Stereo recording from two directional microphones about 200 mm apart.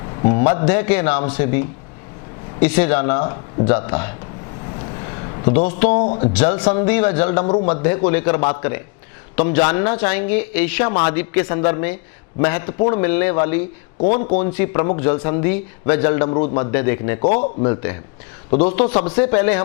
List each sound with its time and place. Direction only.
0.3 s speech: 15° left (ahead or behind)
4.8 s a sound: 25° left (ahead or behind)
5.5 s speech: 10° left (ahead or behind)
14.0 s a man's voice: 40° left (ahead or behind)
14.3 s speech: 10° left (ahead or behind)